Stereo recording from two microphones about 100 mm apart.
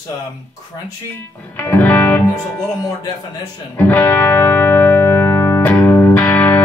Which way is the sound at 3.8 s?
15° left (ahead or behind).